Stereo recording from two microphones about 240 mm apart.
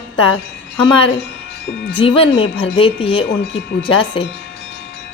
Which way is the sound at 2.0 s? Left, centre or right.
Left.